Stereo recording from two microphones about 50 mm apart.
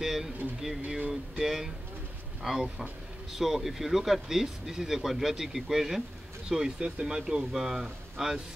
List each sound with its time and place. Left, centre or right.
0.0 s speech: centre
0.8 s a sound: right
1.4 s speech: centre